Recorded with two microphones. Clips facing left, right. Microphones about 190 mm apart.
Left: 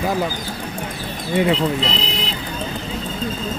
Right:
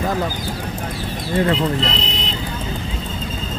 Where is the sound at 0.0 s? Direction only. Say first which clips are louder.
Even; 10° left (ahead or behind).